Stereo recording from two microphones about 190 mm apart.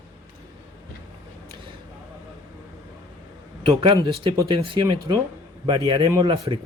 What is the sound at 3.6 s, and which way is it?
Speech, 25° right (ahead or behind).